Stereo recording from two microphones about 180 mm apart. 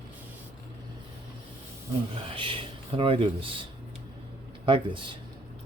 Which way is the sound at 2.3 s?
30° right (ahead or behind).